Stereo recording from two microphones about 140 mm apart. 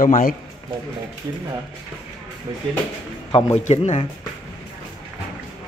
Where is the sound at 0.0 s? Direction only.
80° left.